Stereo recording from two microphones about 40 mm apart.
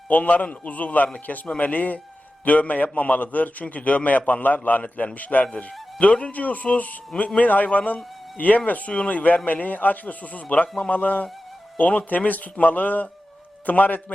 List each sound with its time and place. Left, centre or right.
0.1 s a man's voice: left